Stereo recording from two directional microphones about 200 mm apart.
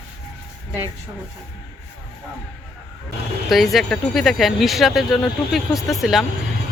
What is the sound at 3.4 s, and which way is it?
Speech, centre (ahead or behind).